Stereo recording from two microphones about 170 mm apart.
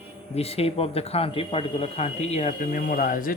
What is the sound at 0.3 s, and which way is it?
A man's voice, 35° left (ahead or behind).